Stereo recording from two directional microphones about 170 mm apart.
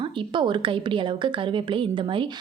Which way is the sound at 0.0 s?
30° right (ahead or behind).